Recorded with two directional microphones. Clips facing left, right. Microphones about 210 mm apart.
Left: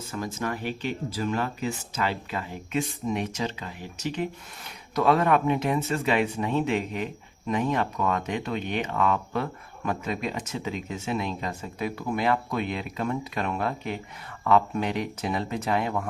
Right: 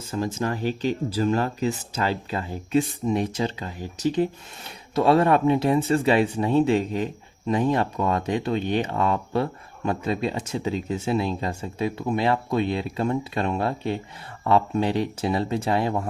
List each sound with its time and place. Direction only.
0.1 s speech: 30° right (ahead or behind)